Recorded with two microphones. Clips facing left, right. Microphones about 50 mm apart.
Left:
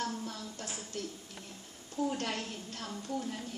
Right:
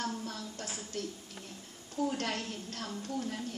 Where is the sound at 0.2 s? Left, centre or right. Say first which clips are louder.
Right 1 dB; left.